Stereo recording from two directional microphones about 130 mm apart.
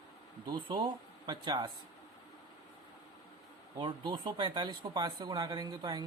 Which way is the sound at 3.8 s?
35° right (ahead or behind).